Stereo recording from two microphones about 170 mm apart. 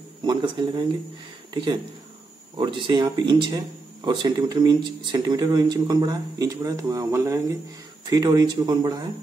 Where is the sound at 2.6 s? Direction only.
30° right (ahead or behind).